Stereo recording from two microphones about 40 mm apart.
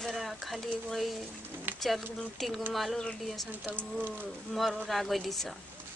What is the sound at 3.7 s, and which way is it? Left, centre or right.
Speech, right.